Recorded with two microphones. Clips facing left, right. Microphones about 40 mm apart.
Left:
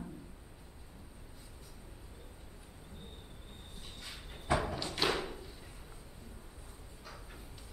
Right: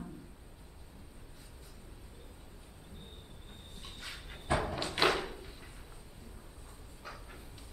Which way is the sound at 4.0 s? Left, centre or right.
Centre.